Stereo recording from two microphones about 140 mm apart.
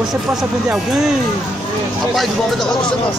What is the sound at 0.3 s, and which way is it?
Speech, 5° right (ahead or behind).